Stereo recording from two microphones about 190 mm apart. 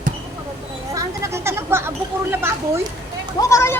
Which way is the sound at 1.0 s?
15° right (ahead or behind).